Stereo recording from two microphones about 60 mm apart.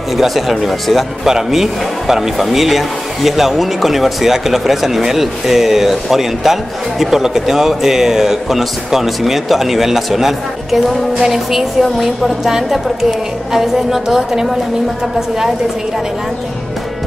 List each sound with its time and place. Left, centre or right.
0.2 s a woman's voice: centre